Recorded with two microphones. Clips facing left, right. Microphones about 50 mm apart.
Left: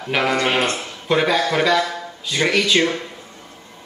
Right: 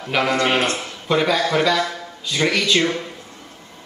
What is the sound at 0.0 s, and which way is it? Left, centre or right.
Speech, centre.